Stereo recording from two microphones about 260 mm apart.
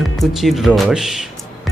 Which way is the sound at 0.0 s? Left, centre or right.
Centre.